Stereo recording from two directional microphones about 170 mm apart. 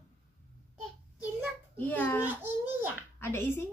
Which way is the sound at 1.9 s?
10° left (ahead or behind).